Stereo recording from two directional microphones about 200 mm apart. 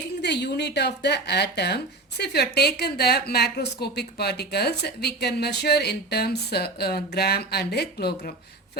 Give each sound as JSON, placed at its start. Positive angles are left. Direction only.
{"t": 0.2, "sound": "speech", "side_deg": 55}